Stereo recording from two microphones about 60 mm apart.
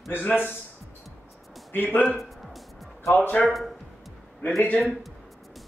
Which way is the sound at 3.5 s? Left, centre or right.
Centre.